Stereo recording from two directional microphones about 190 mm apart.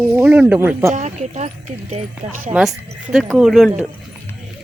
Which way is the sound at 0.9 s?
35° right (ahead or behind).